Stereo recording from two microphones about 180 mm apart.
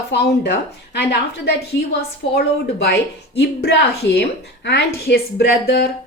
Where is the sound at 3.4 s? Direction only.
65° left (ahead or behind).